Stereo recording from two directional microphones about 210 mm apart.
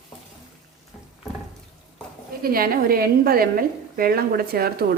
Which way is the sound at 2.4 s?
45° right (ahead or behind).